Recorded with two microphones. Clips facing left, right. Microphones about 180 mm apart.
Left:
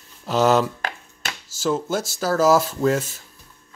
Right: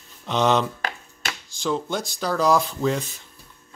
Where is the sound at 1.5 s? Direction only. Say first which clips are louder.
Left 3 dB; 5° left (ahead or behind).